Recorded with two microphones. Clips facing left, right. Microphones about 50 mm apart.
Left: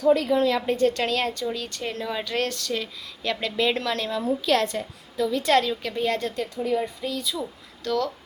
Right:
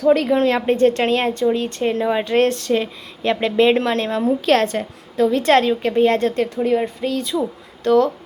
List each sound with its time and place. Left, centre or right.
0.1 s a woman's voice: right
7.9 s a woman's voice: right